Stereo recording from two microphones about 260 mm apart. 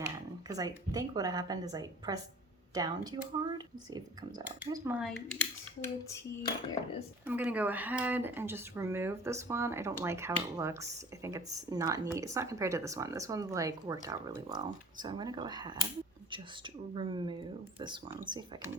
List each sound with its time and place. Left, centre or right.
0.4 s speech: centre
7.3 s speech: centre